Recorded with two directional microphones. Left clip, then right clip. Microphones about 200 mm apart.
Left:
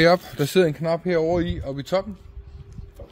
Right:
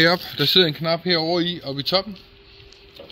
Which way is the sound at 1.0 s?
50° left (ahead or behind).